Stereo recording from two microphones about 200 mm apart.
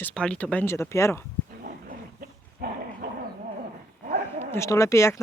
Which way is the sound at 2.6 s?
50° right (ahead or behind).